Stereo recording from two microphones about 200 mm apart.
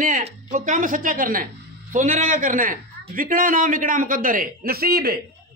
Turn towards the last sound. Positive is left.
turn(degrees=-50)  # may be behind; listen again after turning